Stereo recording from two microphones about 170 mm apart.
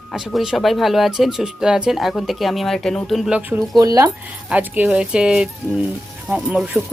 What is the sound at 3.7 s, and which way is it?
Speech, 20° right (ahead or behind).